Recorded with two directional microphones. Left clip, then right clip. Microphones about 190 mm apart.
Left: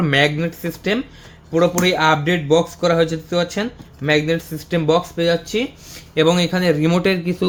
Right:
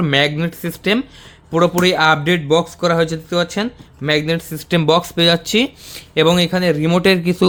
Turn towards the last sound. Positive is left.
turn(degrees=-35)  # may be behind; listen again after turning